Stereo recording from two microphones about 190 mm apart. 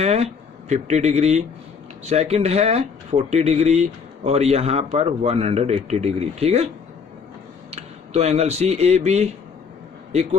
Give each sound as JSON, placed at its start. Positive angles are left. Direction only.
{"t": 0.0, "sound": "speech", "side_deg": -35}
{"t": 7.7, "sound": "speech", "side_deg": -35}